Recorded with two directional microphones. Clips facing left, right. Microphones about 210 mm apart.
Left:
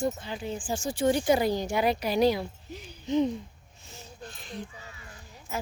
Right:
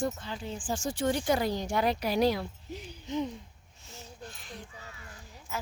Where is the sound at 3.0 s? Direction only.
20° left (ahead or behind).